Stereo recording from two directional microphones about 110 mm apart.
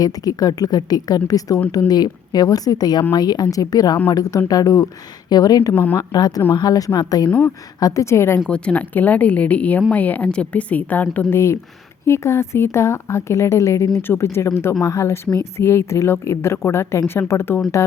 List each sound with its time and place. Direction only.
0.0 s speech: 35° left (ahead or behind)
5.7 s speech: 15° left (ahead or behind)
6.0 s speech: 35° left (ahead or behind)
7.3 s speech: 10° left (ahead or behind)
7.8 s a woman's voice: 30° left (ahead or behind)
8.4 s a woman's voice: 10° left (ahead or behind)